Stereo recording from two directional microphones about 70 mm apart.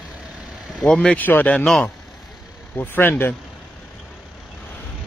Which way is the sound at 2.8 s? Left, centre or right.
Left.